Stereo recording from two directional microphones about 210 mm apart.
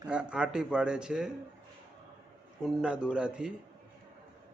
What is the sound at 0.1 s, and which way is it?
A man's voice, 5° right (ahead or behind).